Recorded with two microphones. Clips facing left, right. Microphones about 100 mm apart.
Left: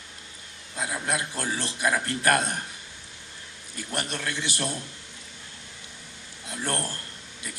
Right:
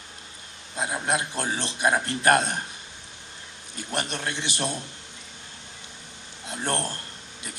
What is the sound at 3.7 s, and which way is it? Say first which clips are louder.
A man's voice: right 2 dB; 20° right (ahead or behind).